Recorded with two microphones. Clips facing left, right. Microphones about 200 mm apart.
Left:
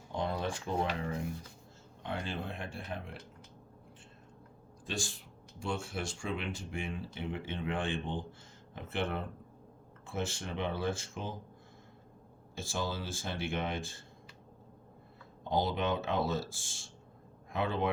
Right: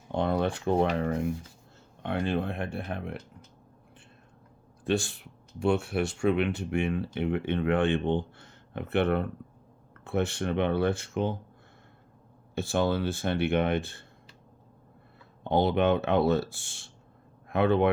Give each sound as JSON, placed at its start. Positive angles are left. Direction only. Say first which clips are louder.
{"t": 0.1, "sound": "speech", "louder": "right 8 dB", "side_deg": -60}
{"t": 4.9, "sound": "speech", "louder": "right 11 dB", "side_deg": -65}
{"t": 12.5, "sound": "speech", "louder": "right 10 dB", "side_deg": -65}
{"t": 15.4, "sound": "speech", "louder": "right 8 dB", "side_deg": -65}